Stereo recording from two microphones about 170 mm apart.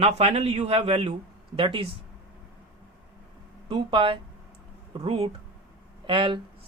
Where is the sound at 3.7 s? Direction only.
30° right (ahead or behind).